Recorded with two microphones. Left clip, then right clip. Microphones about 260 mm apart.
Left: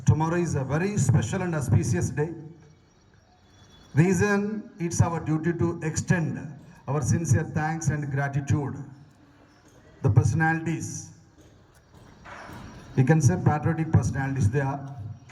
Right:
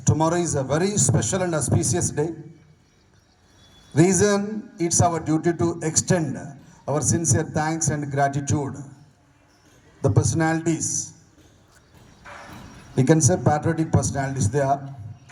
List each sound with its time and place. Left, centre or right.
0.0 s speech: right
3.9 s speech: right
10.0 s speech: right
13.0 s speech: right